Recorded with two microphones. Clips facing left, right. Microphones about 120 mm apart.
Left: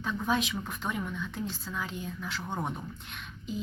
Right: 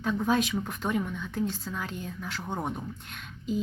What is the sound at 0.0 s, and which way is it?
A woman's voice, 45° right (ahead or behind).